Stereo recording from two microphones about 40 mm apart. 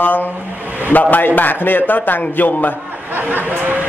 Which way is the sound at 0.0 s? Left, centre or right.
Left.